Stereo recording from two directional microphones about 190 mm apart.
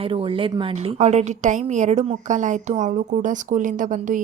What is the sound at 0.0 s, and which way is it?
A woman's voice, 30° right (ahead or behind).